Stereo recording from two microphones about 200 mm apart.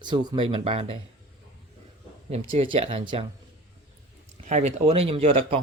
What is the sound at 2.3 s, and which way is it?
Speech, 30° right (ahead or behind).